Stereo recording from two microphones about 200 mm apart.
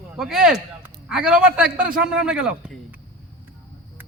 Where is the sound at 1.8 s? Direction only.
45° right (ahead or behind).